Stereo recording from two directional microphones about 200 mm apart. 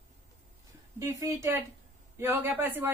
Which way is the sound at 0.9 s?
15° right (ahead or behind).